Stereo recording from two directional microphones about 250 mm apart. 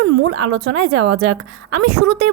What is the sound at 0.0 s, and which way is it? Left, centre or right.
Speech, right.